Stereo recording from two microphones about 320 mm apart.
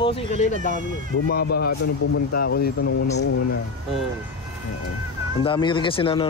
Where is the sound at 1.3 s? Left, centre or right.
Left.